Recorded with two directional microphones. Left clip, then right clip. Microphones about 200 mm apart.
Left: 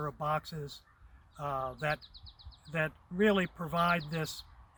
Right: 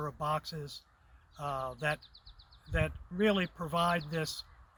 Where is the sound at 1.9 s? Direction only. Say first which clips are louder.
Left 2 dB; 30° left (ahead or behind).